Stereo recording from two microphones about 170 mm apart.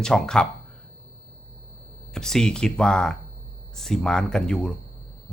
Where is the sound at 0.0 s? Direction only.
5° left (ahead or behind).